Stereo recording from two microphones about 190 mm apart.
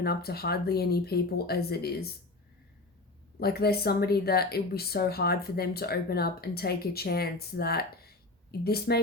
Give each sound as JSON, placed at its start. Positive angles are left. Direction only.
{"t": 0.0, "sound": "speech", "side_deg": 55}
{"t": 3.4, "sound": "speech", "side_deg": 55}